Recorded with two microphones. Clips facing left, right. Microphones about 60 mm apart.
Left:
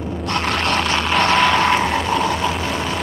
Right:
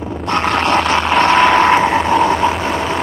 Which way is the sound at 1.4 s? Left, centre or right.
Right.